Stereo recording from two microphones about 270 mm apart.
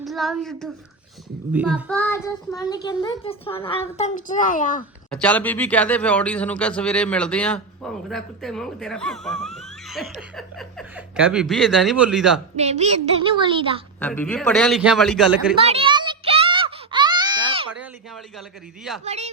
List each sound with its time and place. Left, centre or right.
0.0 s a child's voice: centre; by 4.9 s left
5.1 s speech: centre
12.5 s a woman's voice: right
14.0 s speech: centre
15.5 s a sound: right
17.7 s a sound: centre
19.0 s a woman's voice: right